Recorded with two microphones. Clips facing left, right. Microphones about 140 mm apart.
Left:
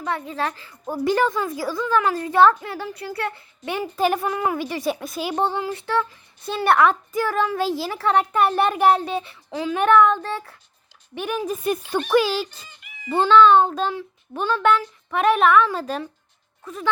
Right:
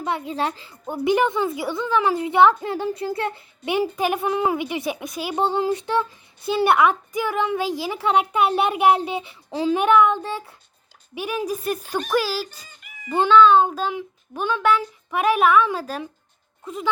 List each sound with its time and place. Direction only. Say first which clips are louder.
0.3 s a woman's voice: right 1 dB; 20° right (ahead or behind)
4.3 s a woman's voice: right 2 dB; 25° right (ahead or behind)
6.4 s a woman's voice: even; 5° right (ahead or behind)
9.5 s speech: right 4 dB; 30° right (ahead or behind)
9.7 s a woman's voice: left 1 dB; 10° right (ahead or behind)
12.5 s cat: right 1 dB; 40° right (ahead or behind)
13.1 s a woman's voice: even; 10° right (ahead or behind)
16.6 s a woman's voice: even; 15° right (ahead or behind)